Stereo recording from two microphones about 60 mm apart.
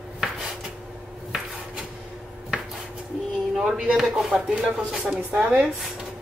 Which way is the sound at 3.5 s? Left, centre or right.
Centre.